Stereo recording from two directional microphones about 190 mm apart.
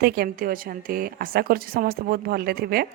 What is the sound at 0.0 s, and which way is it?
Speech, 50° right (ahead or behind).